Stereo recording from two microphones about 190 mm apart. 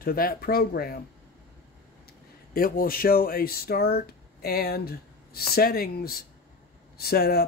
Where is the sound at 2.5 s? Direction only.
50° left (ahead or behind).